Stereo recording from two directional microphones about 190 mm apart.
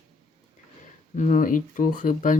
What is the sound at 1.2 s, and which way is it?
Speech, 45° left (ahead or behind).